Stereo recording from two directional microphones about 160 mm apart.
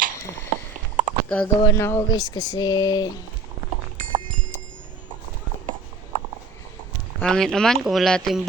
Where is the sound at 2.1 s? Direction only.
25° left (ahead or behind).